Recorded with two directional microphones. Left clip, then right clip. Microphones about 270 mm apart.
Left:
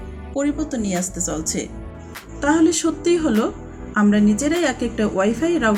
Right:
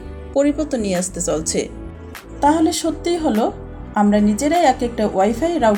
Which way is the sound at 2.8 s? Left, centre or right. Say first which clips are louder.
Even; right.